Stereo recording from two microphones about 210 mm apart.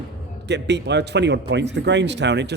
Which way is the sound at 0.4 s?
55° right (ahead or behind).